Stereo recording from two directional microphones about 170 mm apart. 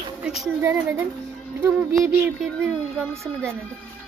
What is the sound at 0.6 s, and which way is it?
Speech, 10° right (ahead or behind).